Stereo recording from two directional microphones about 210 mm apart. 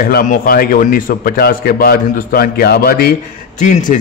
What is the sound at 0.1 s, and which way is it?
A man's voice, 40° left (ahead or behind).